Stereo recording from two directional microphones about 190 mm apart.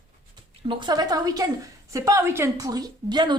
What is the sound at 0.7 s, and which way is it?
A woman's voice, 25° right (ahead or behind).